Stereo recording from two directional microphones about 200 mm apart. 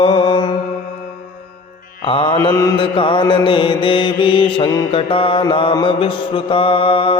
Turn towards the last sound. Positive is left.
turn(degrees=25)  # may be behind; listen again after turning